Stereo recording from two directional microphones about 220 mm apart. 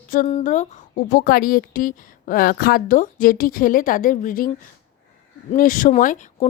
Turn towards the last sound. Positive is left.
turn(degrees=35)  # may be behind; listen again after turning